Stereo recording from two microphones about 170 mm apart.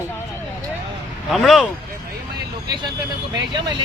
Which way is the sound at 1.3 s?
Centre (ahead or behind).